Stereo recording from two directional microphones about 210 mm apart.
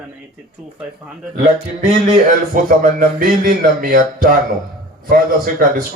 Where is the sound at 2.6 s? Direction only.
40° right (ahead or behind).